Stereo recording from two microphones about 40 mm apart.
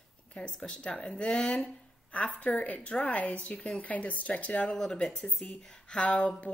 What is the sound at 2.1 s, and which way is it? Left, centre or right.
Speech, left.